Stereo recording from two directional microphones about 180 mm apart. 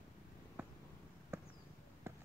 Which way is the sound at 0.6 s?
10° right (ahead or behind).